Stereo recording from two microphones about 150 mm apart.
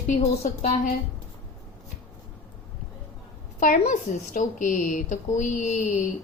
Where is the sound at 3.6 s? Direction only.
60° left (ahead or behind).